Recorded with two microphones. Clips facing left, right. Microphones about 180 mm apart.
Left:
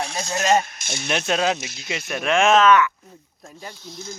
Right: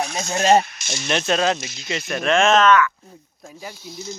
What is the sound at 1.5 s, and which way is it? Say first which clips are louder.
Speech: right 2 dB; 60° left (ahead or behind).